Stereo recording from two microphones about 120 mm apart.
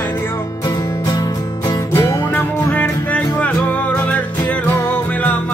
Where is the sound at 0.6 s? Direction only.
35° left (ahead or behind).